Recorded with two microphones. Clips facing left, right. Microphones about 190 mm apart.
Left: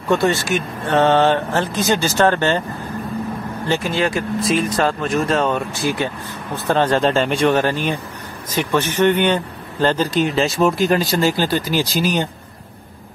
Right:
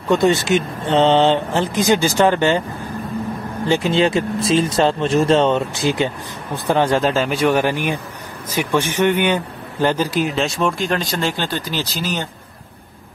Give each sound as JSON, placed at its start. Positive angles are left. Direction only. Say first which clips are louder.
{"t": 0.1, "sound": "speech", "louder": "right 2 dB", "side_deg": -20}
{"t": 3.6, "sound": "speech", "louder": "right 4 dB", "side_deg": -20}